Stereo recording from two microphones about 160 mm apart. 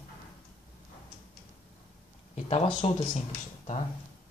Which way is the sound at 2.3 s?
35° left (ahead or behind).